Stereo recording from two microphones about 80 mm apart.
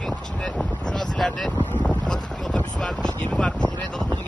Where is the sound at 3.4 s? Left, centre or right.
Centre.